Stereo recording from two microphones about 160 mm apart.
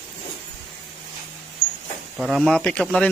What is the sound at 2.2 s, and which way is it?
Speech, centre (ahead or behind).